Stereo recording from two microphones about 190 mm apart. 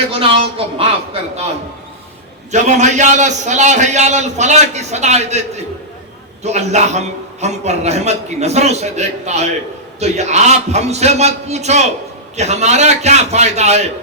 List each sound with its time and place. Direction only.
0.1 s speech: 30° right (ahead or behind)
2.5 s a man's voice: 35° right (ahead or behind)